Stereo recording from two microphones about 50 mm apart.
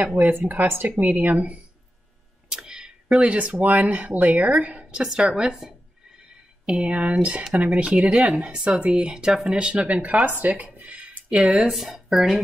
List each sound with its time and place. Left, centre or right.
0.0 s speech: right
2.5 s a sound: centre
3.2 s speech: right
4.9 s a sound: centre
6.9 s speech: right
11.7 s speech: centre